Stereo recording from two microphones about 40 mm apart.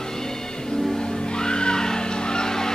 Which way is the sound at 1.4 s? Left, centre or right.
Left.